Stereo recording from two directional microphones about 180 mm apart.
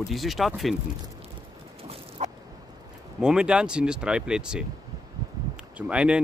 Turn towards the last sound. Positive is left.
turn(degrees=-5)  # may be behind; listen again after turning